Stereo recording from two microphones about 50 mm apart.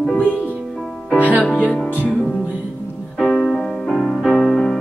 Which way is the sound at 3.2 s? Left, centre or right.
Centre.